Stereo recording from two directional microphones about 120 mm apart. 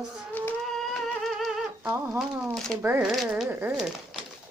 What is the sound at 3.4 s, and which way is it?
Speech, 15° right (ahead or behind).